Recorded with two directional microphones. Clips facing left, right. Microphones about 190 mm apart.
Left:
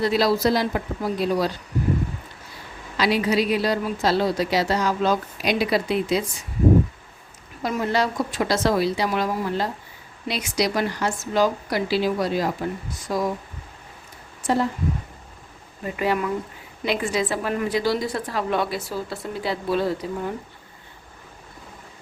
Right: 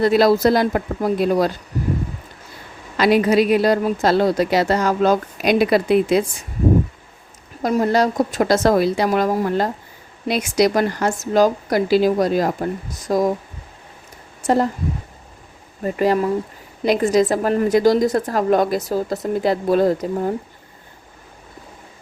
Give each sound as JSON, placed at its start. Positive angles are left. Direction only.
{"t": 0.0, "sound": "a woman's voice", "side_deg": -50}
{"t": 3.0, "sound": "a woman's voice", "side_deg": -50}
{"t": 7.6, "sound": "a woman's voice", "side_deg": -40}
{"t": 14.4, "sound": "a woman's voice", "side_deg": -45}
{"t": 15.8, "sound": "a woman's voice", "side_deg": -40}